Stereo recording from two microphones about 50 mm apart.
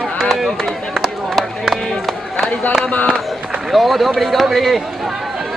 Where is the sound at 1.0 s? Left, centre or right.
Centre.